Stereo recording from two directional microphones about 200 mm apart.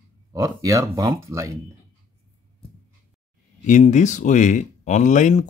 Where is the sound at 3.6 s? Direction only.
35° left (ahead or behind).